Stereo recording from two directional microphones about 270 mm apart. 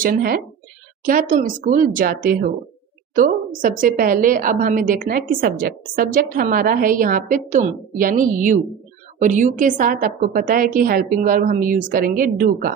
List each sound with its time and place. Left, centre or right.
0.0 s a woman's voice: right